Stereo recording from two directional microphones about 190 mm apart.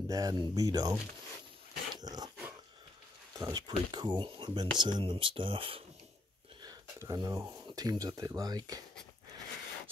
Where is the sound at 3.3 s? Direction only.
20° right (ahead or behind).